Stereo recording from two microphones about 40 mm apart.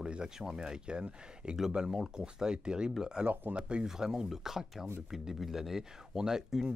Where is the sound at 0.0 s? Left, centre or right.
Centre.